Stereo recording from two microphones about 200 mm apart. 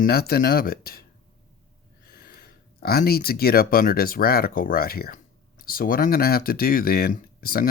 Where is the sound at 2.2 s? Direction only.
50° left (ahead or behind).